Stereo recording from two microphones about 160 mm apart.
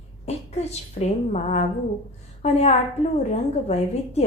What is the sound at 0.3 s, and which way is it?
A woman's voice, 40° left (ahead or behind).